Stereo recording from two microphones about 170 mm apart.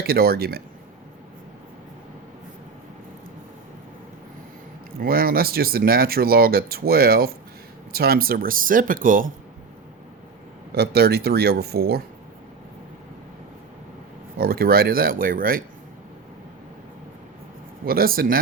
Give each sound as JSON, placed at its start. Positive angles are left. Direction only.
{"t": 0.0, "sound": "speech", "side_deg": -65}
{"t": 4.9, "sound": "speech", "side_deg": -60}
{"t": 10.8, "sound": "speech", "side_deg": -70}
{"t": 14.3, "sound": "speech", "side_deg": -65}
{"t": 17.8, "sound": "speech", "side_deg": -60}